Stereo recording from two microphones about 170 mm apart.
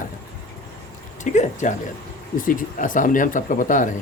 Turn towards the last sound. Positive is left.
turn(degrees=50)  # may be behind; listen again after turning